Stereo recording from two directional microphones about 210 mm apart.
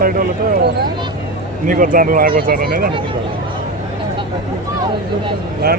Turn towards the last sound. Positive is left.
turn(degrees=-50)  # may be behind; listen again after turning